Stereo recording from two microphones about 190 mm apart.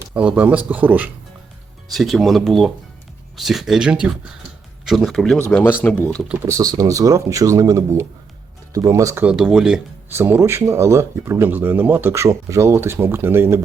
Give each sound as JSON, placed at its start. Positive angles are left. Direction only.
{"t": 0.1, "sound": "speech", "side_deg": -5}
{"t": 6.2, "sound": "speech", "side_deg": -10}
{"t": 9.3, "sound": "speech", "side_deg": -5}